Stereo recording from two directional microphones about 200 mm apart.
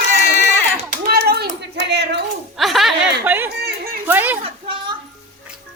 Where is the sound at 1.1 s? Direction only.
50° right (ahead or behind).